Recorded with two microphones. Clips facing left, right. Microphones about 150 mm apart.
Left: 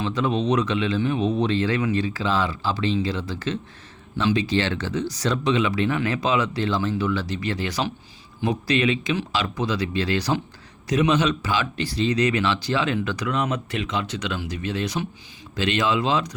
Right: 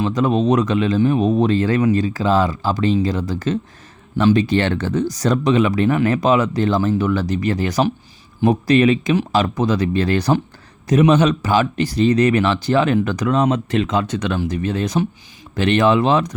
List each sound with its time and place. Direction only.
0.0 s speech: 45° right (ahead or behind)